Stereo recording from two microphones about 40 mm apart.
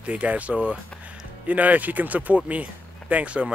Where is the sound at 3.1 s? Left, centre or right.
Right.